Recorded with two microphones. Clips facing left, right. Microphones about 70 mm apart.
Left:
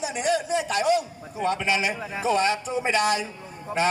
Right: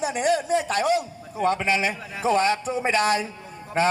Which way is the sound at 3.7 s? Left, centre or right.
Left.